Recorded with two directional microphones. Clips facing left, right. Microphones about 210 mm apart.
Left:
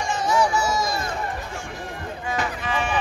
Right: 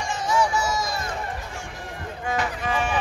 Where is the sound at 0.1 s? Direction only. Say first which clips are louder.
Left 2 dB; 35° left (ahead or behind).